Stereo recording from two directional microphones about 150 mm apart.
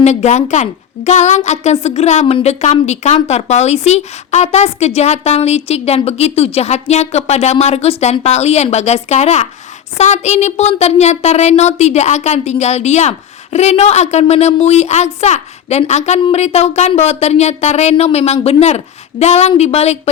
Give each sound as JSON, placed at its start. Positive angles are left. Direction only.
{"t": 0.0, "sound": "speech", "side_deg": 50}